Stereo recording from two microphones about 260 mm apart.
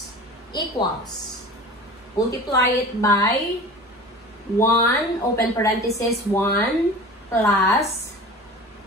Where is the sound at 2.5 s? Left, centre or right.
Centre.